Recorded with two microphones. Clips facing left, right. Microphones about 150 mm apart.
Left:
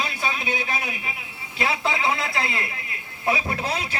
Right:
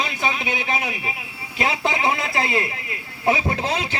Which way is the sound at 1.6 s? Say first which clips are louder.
Right 2 dB; 20° right (ahead or behind).